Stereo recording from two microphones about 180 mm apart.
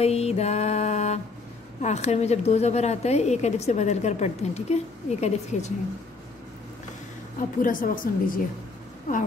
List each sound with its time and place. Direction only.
0.0 s music: 35° left (ahead or behind)
1.8 s a woman's voice: 40° left (ahead or behind)
7.3 s a woman's voice: 50° left (ahead or behind)